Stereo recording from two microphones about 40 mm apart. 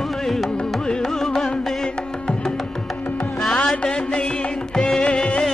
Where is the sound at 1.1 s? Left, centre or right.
Centre.